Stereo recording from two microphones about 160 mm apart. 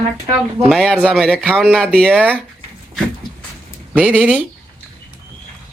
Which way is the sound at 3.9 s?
10° right (ahead or behind).